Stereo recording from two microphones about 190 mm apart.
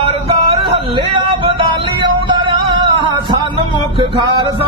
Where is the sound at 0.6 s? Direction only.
30° right (ahead or behind).